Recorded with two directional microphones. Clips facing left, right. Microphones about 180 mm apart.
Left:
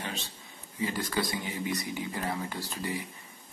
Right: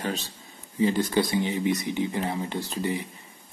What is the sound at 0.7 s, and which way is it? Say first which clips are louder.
Speech: right 8 dB; 25° right (ahead or behind).